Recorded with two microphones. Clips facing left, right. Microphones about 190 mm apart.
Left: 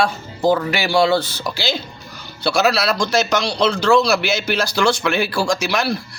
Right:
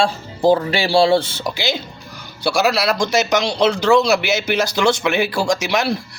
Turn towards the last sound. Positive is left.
turn(degrees=-20)  # may be behind; listen again after turning